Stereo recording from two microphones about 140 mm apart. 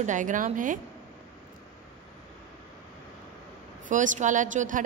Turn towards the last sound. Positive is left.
turn(degrees=-65)  # may be behind; listen again after turning